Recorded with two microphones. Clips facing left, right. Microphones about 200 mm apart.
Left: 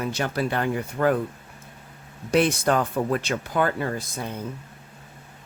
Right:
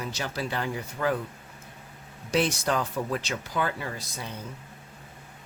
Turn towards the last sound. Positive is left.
turn(degrees=50)  # may be behind; listen again after turning